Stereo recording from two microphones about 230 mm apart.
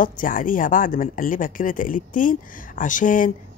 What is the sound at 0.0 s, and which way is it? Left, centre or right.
Speech, left.